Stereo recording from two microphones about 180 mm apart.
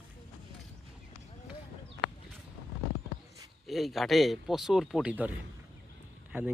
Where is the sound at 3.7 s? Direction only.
Centre (ahead or behind).